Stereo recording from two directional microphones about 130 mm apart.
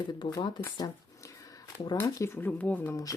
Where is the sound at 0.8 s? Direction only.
25° left (ahead or behind).